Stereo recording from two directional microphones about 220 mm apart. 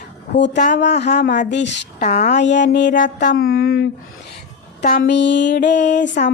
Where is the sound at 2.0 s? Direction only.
30° left (ahead or behind).